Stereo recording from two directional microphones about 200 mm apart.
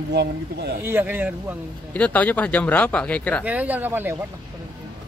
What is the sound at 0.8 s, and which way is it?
Speech, 10° right (ahead or behind).